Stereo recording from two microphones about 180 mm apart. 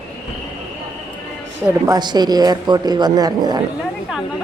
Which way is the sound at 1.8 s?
25° right (ahead or behind).